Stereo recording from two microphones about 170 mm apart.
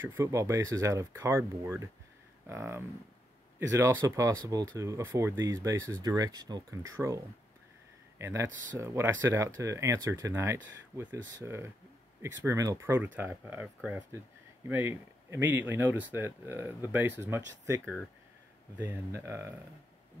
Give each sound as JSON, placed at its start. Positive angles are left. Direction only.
{"t": 0.0, "sound": "speech", "side_deg": -15}
{"t": 8.2, "sound": "speech", "side_deg": -15}
{"t": 14.7, "sound": "speech", "side_deg": -15}